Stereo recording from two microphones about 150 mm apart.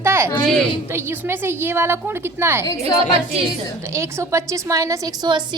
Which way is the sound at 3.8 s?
20° right (ahead or behind).